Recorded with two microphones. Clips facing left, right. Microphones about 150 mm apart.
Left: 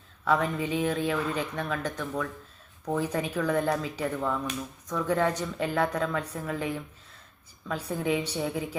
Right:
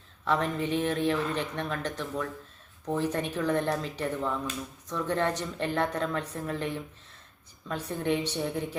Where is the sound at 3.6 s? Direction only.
10° left (ahead or behind).